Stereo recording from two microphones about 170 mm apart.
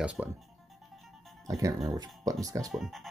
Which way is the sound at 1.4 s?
20° right (ahead or behind).